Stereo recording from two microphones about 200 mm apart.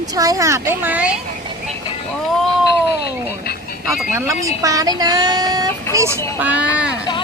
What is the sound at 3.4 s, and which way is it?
Music, 50° left (ahead or behind).